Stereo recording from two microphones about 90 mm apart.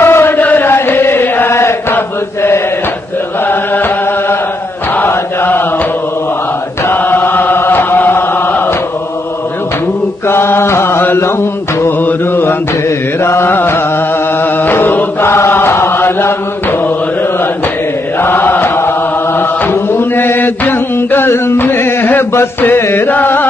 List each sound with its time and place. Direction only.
0.0 s chant: 25° left (ahead or behind)
4.9 s mantra: 25° left (ahead or behind)
6.9 s chant: 20° left (ahead or behind)
10.2 s mantra: 25° left (ahead or behind)
14.4 s chant: 20° left (ahead or behind)
18.2 s chant: 25° left (ahead or behind)